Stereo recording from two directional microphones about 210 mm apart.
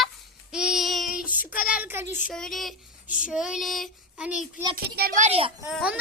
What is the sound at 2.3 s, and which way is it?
A woman's voice, centre (ahead or behind).